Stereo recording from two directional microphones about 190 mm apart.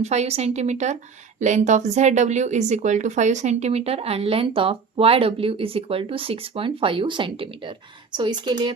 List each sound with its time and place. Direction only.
0.0 s speech: 35° right (ahead or behind)